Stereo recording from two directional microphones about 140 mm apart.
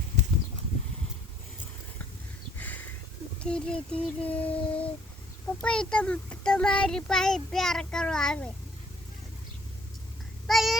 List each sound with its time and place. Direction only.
2.6 s a sound: 10° left (ahead or behind)
3.4 s child singing: 5° left (ahead or behind)
5.6 s speech: 5° left (ahead or behind)
10.4 s cat: centre (ahead or behind)